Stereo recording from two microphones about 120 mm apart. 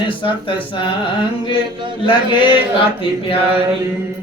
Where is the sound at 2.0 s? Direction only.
45° left (ahead or behind).